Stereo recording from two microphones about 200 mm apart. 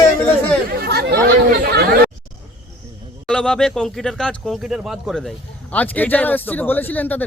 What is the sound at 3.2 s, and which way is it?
Speech, 5° left (ahead or behind).